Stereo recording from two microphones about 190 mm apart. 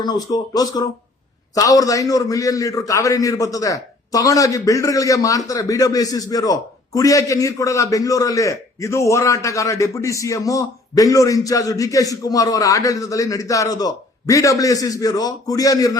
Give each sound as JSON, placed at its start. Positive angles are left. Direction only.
{"t": 0.0, "sound": "a man's voice", "side_deg": 20}